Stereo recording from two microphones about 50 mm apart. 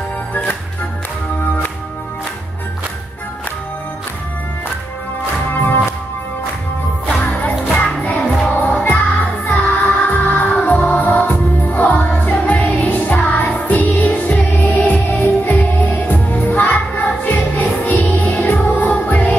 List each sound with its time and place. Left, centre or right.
5.5 s music: left
7.2 s music: left